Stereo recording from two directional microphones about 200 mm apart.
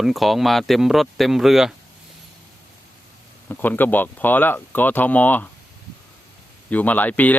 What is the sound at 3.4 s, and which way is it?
Speech, 10° left (ahead or behind).